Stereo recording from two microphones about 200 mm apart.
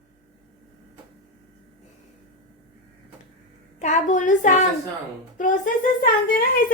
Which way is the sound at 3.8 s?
35° left (ahead or behind).